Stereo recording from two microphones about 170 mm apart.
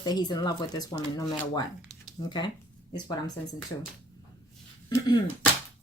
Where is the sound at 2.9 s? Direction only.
25° left (ahead or behind).